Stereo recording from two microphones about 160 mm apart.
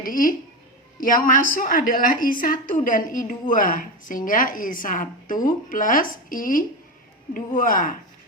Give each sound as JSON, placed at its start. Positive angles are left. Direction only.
{"t": 0.0, "sound": "a woman's voice", "side_deg": 60}